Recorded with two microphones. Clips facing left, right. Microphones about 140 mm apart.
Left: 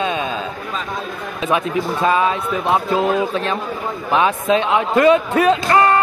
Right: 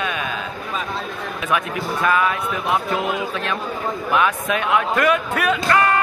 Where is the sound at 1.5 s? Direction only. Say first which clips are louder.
Left 4 dB; 25° left (ahead or behind).